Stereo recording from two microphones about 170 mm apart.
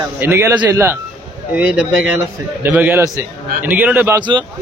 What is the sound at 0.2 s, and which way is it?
Speech, 15° right (ahead or behind).